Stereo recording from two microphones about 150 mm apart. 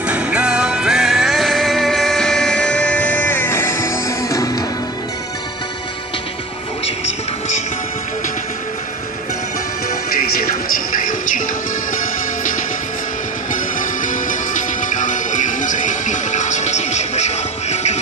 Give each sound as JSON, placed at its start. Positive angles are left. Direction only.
{"t": 0.1, "sound": "music", "side_deg": -10}
{"t": 10.4, "sound": "music", "side_deg": 60}